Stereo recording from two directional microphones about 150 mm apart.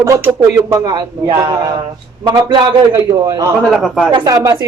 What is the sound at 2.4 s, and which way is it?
Speech, 30° right (ahead or behind).